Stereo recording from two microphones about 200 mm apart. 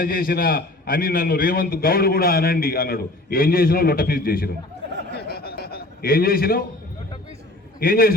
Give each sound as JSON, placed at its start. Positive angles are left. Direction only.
{"t": 0.0, "sound": "a man's voice", "side_deg": 45}
{"t": 5.1, "sound": "a sound", "side_deg": 50}
{"t": 7.8, "sound": "a man's voice", "side_deg": 45}